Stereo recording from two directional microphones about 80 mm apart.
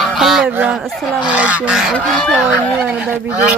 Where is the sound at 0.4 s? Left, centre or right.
Right.